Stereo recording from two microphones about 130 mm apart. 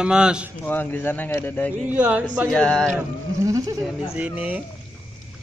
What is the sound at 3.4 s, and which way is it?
Speech, 25° right (ahead or behind).